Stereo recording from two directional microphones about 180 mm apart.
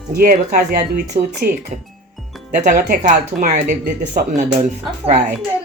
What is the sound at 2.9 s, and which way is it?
Speech, 60° right (ahead or behind).